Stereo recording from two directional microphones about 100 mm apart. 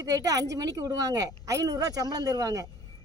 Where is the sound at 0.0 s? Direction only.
35° right (ahead or behind).